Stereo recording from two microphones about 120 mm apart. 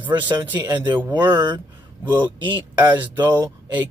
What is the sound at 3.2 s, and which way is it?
Speech, 15° right (ahead or behind).